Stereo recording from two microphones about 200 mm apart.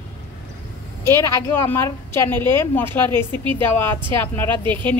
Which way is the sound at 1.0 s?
15° left (ahead or behind).